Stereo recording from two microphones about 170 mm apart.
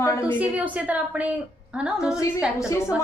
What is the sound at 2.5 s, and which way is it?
Speech, 20° left (ahead or behind).